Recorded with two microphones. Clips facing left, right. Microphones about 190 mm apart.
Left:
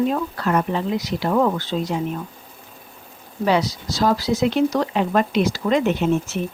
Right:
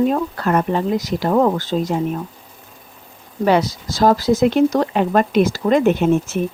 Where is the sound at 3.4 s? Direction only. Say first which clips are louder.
Right 3 dB; 50° right (ahead or behind).